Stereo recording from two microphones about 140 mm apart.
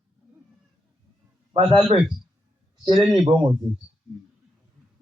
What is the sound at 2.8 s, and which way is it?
Speech, 40° right (ahead or behind).